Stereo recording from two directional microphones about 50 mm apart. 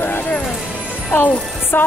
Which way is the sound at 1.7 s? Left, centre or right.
Left.